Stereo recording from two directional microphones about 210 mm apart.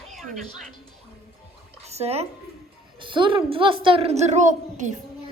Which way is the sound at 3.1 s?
25° right (ahead or behind).